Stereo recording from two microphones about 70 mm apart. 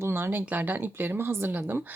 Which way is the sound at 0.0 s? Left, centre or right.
Right.